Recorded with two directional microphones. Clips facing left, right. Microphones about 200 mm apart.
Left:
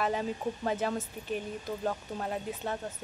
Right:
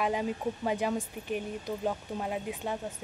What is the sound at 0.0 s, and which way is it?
A woman's voice, 10° right (ahead or behind).